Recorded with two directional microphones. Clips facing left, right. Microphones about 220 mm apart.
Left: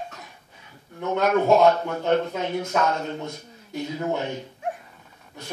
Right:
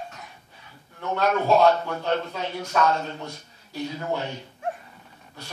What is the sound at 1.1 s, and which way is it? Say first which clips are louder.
A man's voice: left 2 dB; 20° left (ahead or behind).